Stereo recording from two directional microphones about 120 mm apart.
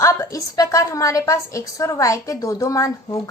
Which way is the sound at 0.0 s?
25° left (ahead or behind).